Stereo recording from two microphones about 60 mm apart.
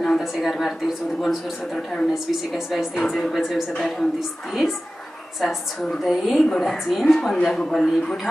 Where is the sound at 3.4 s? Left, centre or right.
Centre.